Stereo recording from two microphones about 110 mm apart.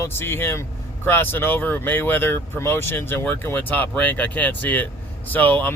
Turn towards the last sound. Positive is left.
turn(degrees=15)  # may be behind; listen again after turning